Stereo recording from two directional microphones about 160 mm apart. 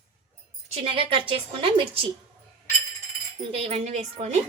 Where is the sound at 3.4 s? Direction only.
40° right (ahead or behind).